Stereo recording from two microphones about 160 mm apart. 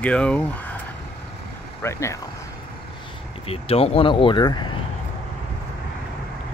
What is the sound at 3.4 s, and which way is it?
Speech, 40° left (ahead or behind).